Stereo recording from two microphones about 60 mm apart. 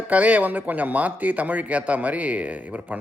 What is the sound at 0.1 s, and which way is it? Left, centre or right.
Speech, right.